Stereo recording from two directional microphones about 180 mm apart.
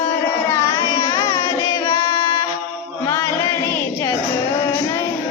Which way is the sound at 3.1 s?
15° left (ahead or behind).